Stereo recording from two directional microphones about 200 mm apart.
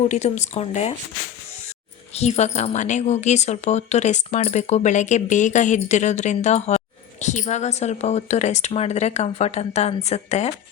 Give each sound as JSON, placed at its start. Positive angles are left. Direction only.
{"t": 0.0, "sound": "speech", "side_deg": 35}
{"t": 2.1, "sound": "speech", "side_deg": 35}